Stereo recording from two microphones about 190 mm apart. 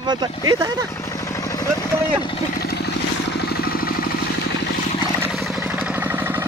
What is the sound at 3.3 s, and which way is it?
Vehicle, 60° left (ahead or behind).